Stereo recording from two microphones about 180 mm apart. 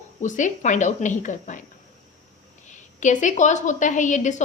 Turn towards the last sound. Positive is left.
turn(degrees=45)  # may be behind; listen again after turning